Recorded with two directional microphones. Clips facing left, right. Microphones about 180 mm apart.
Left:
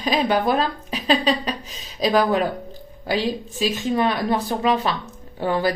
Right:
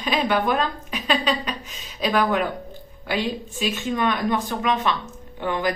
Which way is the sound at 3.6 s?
35° left (ahead or behind).